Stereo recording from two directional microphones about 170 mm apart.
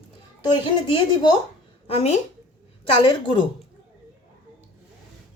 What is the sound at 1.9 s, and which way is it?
A woman's voice, 40° left (ahead or behind).